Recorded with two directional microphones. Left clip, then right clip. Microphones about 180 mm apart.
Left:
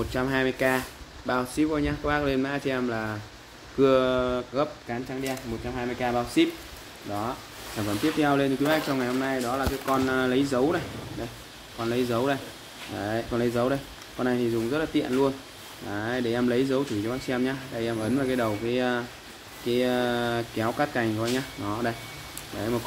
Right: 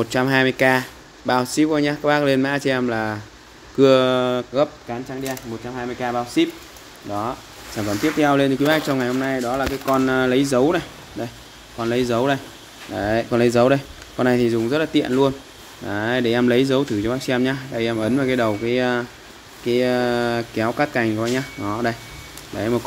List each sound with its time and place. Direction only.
0.0 s speech: 55° right (ahead or behind)
5.2 s speech: 30° right (ahead or behind)
8.0 s speech: 55° right (ahead or behind)
11.8 s speech: 50° right (ahead or behind)